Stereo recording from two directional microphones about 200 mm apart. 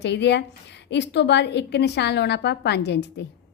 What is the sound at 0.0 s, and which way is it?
A woman's voice, 60° left (ahead or behind).